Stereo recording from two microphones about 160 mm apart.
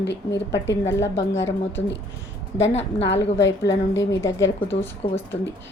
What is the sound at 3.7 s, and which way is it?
A woman's voice, 20° left (ahead or behind).